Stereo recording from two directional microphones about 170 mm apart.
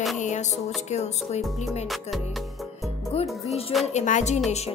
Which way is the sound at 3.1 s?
35° left (ahead or behind).